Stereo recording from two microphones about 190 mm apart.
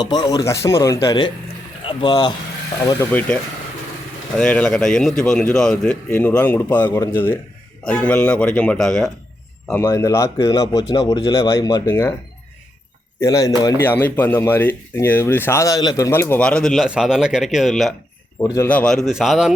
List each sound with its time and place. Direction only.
0.0 s speech: 20° left (ahead or behind)
3.1 s speech: 10° left (ahead or behind)
4.4 s speech: 5° left (ahead or behind)
9.6 s speech: 15° left (ahead or behind)
13.1 s speech: 15° left (ahead or behind); by 17.9 s centre (ahead or behind)
18.3 s speech: 15° left (ahead or behind); by 19.5 s centre (ahead or behind)